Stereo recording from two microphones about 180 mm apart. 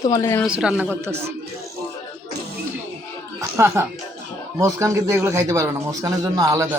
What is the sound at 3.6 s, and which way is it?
A man's voice, 15° right (ahead or behind).